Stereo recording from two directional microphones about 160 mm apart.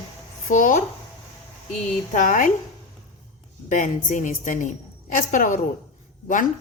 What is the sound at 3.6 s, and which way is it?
A woman's voice, 55° left (ahead or behind).